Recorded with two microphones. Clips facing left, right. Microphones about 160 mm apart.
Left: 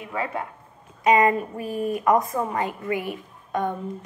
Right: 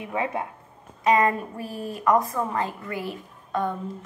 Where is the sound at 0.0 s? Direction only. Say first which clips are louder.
Right 1 dB; 20° right (ahead or behind).